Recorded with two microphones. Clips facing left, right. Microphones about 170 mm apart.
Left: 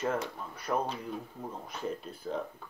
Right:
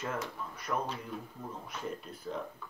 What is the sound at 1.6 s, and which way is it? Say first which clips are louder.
Speech: left 4 dB; 30° left (ahead or behind).